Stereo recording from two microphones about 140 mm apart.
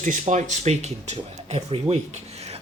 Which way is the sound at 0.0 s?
60° right (ahead or behind).